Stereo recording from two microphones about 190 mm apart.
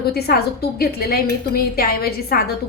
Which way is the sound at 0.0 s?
55° left (ahead or behind).